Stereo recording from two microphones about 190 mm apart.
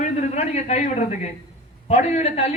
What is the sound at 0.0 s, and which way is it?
A man's voice, 35° left (ahead or behind).